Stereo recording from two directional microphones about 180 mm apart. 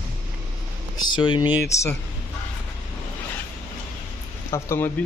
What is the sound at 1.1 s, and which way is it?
Speech, 25° left (ahead or behind).